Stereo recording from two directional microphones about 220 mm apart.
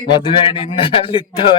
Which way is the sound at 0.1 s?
25° left (ahead or behind).